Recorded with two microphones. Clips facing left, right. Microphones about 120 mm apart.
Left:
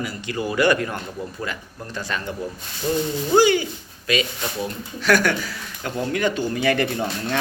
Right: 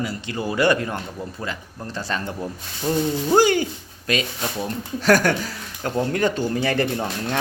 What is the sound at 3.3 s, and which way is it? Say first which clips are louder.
Speech: left 1 dB; 45° right (ahead or behind).